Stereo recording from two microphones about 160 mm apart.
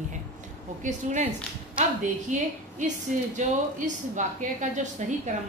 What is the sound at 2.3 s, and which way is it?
A woman's voice, 50° right (ahead or behind).